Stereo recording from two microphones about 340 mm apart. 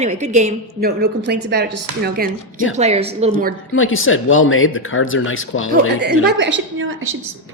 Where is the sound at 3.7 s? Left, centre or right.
Left.